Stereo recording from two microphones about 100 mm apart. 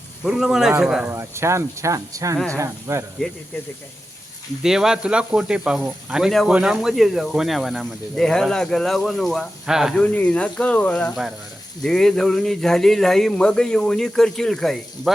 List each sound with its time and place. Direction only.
0.3 s speech: 5° right (ahead or behind)
1.1 s speech: 25° right (ahead or behind)
4.6 s speech: 5° right (ahead or behind)
10.0 s speech: 15° left (ahead or behind)